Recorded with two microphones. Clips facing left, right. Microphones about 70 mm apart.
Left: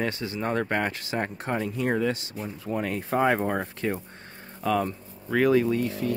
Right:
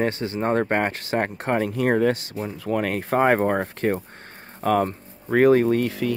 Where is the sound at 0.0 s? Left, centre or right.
Right.